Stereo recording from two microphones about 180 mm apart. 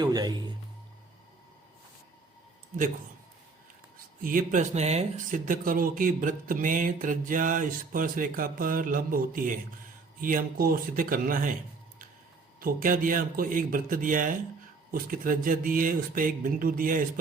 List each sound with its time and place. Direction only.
0.0 s speech: 25° right (ahead or behind)
3.9 s speech: 50° right (ahead or behind)
12.5 s speech: 50° right (ahead or behind)